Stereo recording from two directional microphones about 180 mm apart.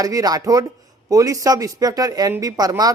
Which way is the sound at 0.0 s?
20° right (ahead or behind).